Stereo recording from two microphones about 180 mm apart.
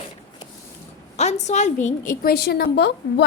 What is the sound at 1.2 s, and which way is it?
A woman's voice, 40° left (ahead or behind).